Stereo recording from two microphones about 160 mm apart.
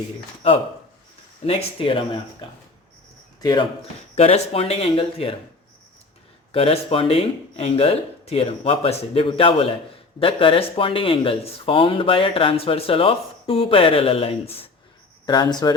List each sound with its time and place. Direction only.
1.5 s speech: 35° left (ahead or behind)
3.4 s speech: 30° left (ahead or behind)
4.1 s speech: 40° left (ahead or behind)
6.5 s speech: 35° left (ahead or behind)